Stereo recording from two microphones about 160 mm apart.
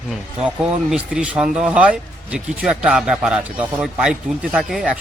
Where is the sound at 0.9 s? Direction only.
5° right (ahead or behind).